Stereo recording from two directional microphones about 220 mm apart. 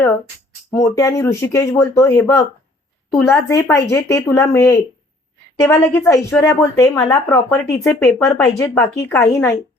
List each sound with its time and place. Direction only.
0.7 s a woman's voice: 15° left (ahead or behind)